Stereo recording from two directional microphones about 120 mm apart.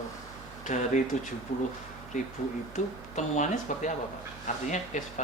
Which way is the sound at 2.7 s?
90° left.